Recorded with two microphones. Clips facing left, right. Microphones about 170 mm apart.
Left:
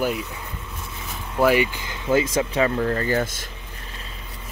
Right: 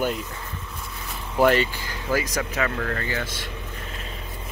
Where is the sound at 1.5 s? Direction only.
15° left (ahead or behind).